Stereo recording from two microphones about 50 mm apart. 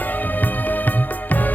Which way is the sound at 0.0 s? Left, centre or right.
Left.